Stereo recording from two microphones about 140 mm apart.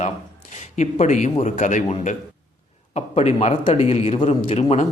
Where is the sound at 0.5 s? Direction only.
55° left (ahead or behind).